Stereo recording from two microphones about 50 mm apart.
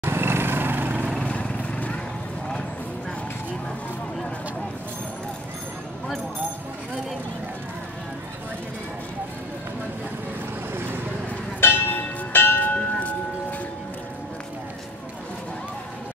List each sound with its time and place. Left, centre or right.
0.0 s lawn mower: right
1.2 s lawn mower: left
11.6 s music: left